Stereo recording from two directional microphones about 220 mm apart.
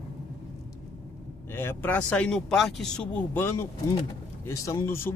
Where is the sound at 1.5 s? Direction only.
10° left (ahead or behind).